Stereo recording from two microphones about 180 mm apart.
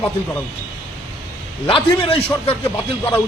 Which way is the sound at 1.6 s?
30° left (ahead or behind).